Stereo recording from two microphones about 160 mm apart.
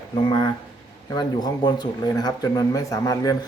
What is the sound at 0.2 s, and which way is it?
Speech, 30° left (ahead or behind).